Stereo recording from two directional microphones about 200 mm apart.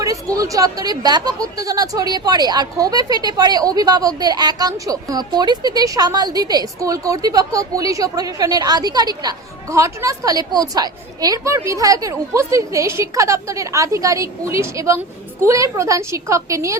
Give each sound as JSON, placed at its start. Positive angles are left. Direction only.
{"t": 0.0, "sound": "speech", "side_deg": -15}